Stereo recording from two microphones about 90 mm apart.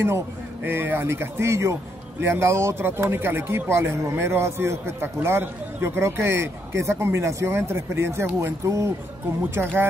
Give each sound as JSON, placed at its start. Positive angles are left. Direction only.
{"t": 0.7, "sound": "speech", "side_deg": -25}